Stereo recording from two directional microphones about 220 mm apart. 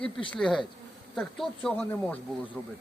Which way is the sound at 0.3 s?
Centre (ahead or behind).